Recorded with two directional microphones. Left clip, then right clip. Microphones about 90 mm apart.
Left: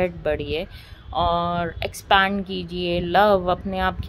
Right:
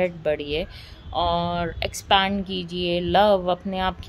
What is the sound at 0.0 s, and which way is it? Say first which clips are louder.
Speech: even; 30° right (ahead or behind).